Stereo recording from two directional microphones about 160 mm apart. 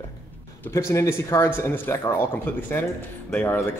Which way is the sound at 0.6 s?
15° left (ahead or behind).